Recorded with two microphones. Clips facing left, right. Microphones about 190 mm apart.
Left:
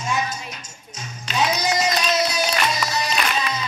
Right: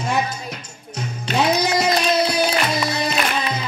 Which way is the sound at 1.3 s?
60° right (ahead or behind).